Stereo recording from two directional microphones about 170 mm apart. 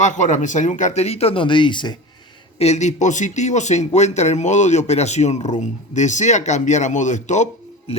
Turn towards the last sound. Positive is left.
turn(degrees=45)  # may be behind; listen again after turning